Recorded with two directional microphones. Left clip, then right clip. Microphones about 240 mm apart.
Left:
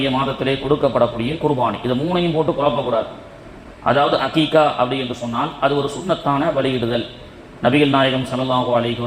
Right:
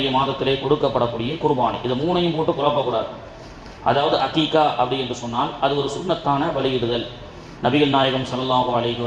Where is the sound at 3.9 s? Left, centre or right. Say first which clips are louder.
Left 2 dB; left.